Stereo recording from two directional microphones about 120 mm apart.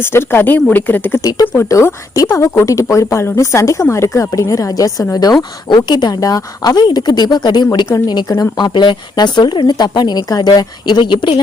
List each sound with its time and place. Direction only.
0.0 s speech: 20° left (ahead or behind)
1.2 s a woman's voice: 30° left (ahead or behind)